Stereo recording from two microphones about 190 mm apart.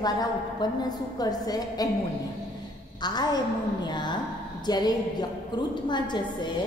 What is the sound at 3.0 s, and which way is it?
A woman's voice, 20° left (ahead or behind).